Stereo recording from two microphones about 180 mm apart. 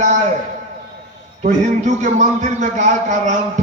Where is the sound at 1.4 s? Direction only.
40° right (ahead or behind).